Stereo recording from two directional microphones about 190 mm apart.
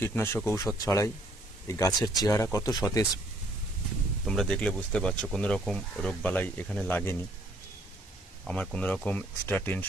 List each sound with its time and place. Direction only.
0.0 s speech: 15° left (ahead or behind)
4.3 s speech: 5° left (ahead or behind)
8.5 s speech: 5° left (ahead or behind)